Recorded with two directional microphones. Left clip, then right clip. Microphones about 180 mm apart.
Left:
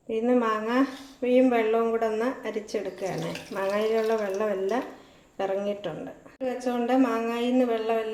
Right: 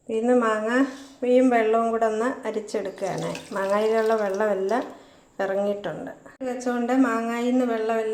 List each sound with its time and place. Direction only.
0.1 s a woman's voice: centre (ahead or behind)
6.4 s a woman's voice: 15° right (ahead or behind)